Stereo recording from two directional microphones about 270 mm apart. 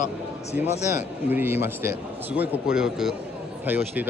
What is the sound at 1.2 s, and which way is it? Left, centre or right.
A man's voice, centre.